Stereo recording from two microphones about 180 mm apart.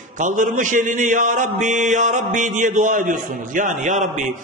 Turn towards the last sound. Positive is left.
turn(degrees=-45)  # may be behind; listen again after turning